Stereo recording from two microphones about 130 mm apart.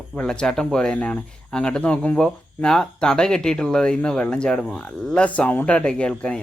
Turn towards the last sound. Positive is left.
turn(degrees=5)  # may be behind; listen again after turning